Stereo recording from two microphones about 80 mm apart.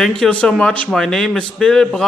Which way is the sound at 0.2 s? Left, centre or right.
Centre.